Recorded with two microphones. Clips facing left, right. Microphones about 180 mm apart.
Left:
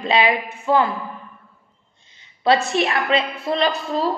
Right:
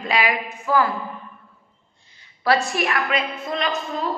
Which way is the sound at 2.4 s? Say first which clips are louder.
Left 3 dB; 25° left (ahead or behind).